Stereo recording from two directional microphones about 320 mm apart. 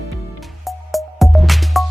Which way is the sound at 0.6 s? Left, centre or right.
Centre.